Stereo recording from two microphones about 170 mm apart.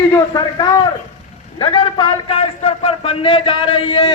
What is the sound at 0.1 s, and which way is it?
A man's voice, 25° left (ahead or behind).